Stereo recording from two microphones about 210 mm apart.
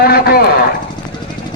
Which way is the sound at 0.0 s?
50° left (ahead or behind).